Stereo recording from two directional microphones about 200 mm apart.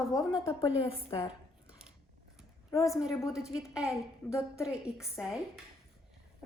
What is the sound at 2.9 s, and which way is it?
A woman's voice, 5° right (ahead or behind).